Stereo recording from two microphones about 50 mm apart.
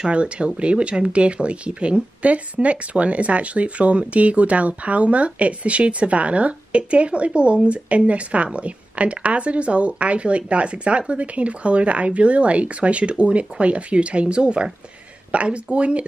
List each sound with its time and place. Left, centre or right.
0.1 s speech: right